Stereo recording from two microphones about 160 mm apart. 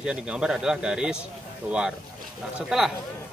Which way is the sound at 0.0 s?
5° right (ahead or behind).